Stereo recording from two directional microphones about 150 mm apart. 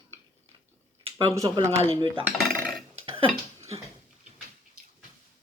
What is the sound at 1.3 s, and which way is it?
Speech, 25° right (ahead or behind).